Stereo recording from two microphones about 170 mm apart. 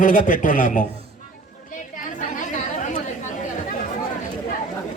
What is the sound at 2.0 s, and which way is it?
Chatter, 45° left (ahead or behind).